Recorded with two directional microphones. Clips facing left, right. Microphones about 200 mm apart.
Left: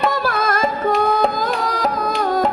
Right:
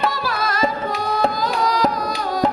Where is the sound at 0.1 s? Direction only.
50° left (ahead or behind).